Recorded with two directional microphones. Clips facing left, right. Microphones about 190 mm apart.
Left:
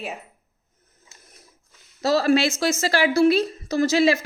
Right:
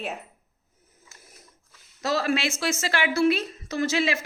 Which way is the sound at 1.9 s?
35° left (ahead or behind).